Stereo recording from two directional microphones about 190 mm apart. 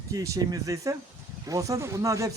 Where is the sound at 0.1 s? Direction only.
20° right (ahead or behind).